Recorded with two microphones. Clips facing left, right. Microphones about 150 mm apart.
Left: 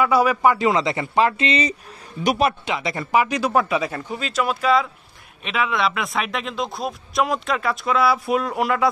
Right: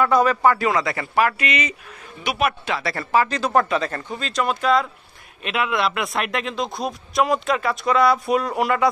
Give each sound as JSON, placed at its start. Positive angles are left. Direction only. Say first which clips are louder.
{"t": 0.0, "sound": "a man's voice", "louder": "even", "side_deg": 10}
{"t": 2.6, "sound": "a man's voice", "louder": "even", "side_deg": 20}